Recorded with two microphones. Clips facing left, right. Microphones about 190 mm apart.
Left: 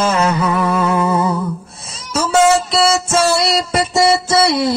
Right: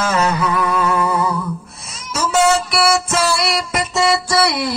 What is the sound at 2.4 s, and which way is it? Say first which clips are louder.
Music: left 2 dB; 25° left (ahead or behind).